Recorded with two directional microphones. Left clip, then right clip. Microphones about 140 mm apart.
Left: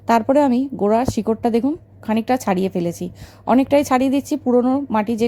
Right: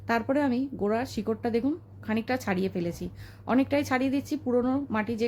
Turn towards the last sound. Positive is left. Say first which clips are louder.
# left 10 dB
turn(degrees=50)  # may be behind; listen again after turning